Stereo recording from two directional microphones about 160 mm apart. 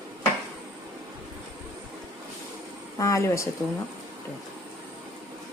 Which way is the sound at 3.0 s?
20° left (ahead or behind).